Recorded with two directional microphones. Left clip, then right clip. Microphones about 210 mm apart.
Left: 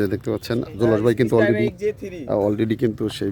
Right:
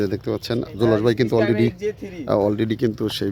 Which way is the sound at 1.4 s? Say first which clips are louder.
Left 1 dB; 25° left (ahead or behind).